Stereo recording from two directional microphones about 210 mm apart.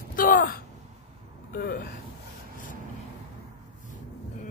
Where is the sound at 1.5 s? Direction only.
50° left (ahead or behind).